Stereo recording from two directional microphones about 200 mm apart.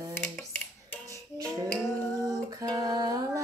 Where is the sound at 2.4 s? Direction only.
20° right (ahead or behind).